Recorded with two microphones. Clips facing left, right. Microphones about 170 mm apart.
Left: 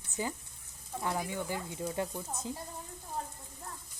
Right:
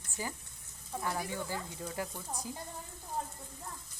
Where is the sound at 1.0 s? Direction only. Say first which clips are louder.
Left 2 dB; 20° left (ahead or behind).